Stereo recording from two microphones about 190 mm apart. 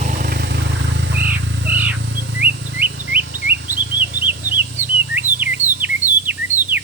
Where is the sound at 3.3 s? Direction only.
60° right (ahead or behind).